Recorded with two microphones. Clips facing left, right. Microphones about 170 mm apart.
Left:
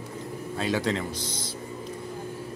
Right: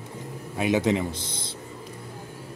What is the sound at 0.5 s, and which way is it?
Speech, 15° right (ahead or behind).